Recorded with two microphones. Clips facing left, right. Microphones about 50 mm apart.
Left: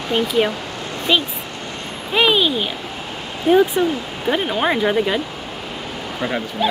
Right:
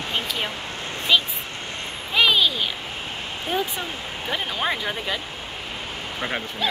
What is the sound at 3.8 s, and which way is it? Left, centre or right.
Speech, centre.